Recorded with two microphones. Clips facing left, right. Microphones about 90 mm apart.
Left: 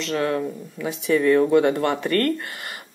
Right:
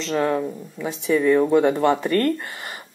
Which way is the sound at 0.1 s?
10° right (ahead or behind).